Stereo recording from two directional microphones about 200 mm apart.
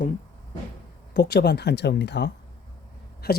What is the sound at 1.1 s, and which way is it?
Speech, 55° left (ahead or behind).